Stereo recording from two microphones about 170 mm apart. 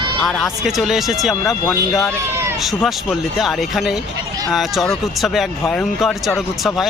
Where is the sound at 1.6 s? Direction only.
20° left (ahead or behind).